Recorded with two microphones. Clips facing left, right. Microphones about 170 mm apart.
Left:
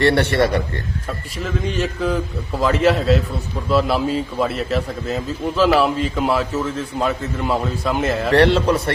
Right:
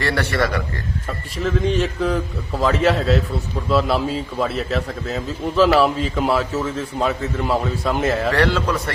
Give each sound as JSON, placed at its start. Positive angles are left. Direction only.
{"t": 0.0, "sound": "a man's voice", "side_deg": 25}
{"t": 1.5, "sound": "a man's voice", "side_deg": 0}
{"t": 8.3, "sound": "a man's voice", "side_deg": 25}